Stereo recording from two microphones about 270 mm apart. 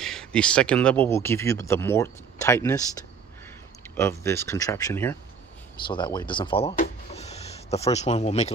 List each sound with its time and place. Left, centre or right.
0.0 s speech: centre
3.9 s speech: centre